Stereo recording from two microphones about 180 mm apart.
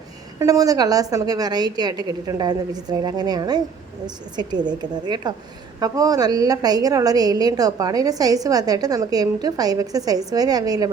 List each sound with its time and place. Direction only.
0.3 s a woman's voice: 20° right (ahead or behind)